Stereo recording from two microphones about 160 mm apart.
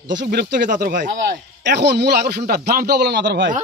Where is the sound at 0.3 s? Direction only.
85° right.